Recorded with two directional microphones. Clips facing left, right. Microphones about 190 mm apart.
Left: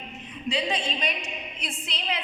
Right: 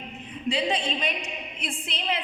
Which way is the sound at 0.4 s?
30° right (ahead or behind).